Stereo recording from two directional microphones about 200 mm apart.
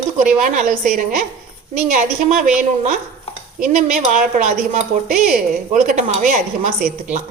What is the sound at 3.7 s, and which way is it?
Speech, 40° right (ahead or behind).